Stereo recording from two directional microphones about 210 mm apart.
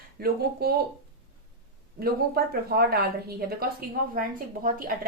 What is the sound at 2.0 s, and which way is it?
Speech, 45° right (ahead or behind).